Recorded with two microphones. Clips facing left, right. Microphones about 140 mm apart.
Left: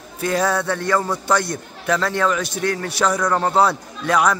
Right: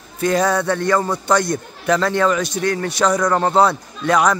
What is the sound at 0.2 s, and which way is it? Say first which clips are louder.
A man's voice: right 3 dB; 5° left (ahead or behind).